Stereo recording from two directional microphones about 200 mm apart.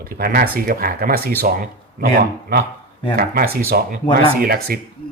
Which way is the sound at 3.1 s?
50° right (ahead or behind).